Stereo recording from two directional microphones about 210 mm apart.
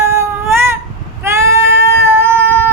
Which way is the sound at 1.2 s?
15° right (ahead or behind).